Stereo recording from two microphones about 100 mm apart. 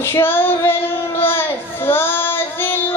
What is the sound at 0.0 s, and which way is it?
Child singing, 25° left (ahead or behind).